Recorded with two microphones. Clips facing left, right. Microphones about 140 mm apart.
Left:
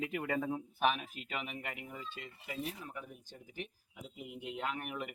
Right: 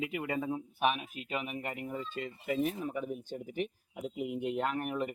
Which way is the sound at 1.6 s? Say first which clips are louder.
Right 7 dB; 35° right (ahead or behind).